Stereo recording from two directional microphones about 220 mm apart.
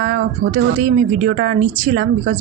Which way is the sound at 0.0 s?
45° right (ahead or behind).